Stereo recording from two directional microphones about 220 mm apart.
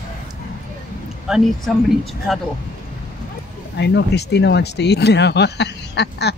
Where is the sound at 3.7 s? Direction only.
50° left (ahead or behind).